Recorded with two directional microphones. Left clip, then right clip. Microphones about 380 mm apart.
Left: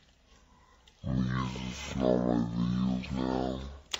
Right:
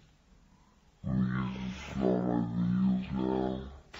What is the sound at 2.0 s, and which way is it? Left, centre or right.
Speech, left.